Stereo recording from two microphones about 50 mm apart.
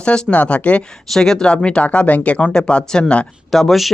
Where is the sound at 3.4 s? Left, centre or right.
Centre.